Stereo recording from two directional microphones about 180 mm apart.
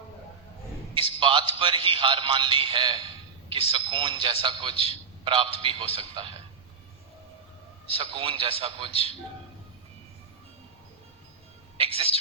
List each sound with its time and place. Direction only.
0.9 s a man's voice: 30° right (ahead or behind)
7.9 s a man's voice: 30° right (ahead or behind)
11.8 s a man's voice: 30° right (ahead or behind)